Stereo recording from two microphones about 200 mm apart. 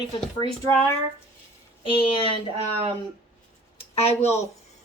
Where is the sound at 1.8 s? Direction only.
25° left (ahead or behind).